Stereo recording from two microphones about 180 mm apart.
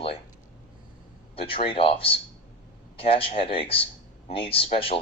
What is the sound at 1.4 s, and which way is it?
Speech, 30° left (ahead or behind).